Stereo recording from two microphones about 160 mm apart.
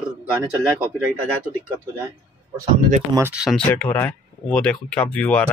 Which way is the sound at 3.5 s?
10° left (ahead or behind).